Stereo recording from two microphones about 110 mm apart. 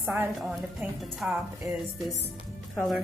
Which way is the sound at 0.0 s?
20° right (ahead or behind).